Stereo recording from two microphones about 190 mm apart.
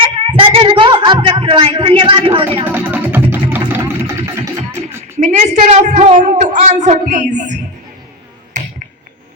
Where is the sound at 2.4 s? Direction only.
10° right (ahead or behind).